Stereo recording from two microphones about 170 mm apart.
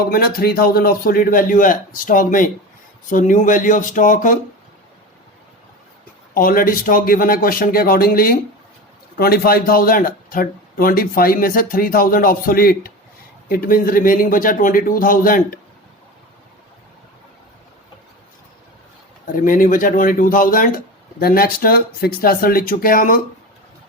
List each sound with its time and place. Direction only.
0.1 s speech: 60° left (ahead or behind)
6.3 s speech: 55° left (ahead or behind)
19.3 s speech: 50° left (ahead or behind)